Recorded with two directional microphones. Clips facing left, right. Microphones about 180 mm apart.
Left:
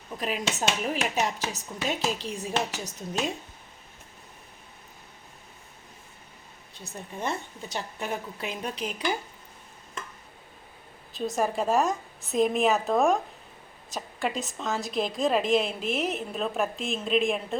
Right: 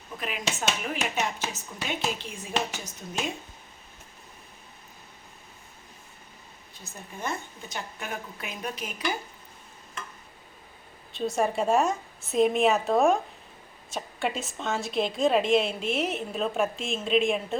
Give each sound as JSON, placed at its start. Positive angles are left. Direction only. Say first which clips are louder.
{"t": 0.2, "sound": "speech", "louder": "left 3 dB", "side_deg": 35}
{"t": 7.2, "sound": "speech", "louder": "left 2 dB", "side_deg": 30}
{"t": 11.3, "sound": "a woman's voice", "louder": "right 1 dB", "side_deg": 0}